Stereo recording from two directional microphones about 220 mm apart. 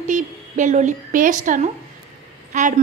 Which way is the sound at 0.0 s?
35° right (ahead or behind).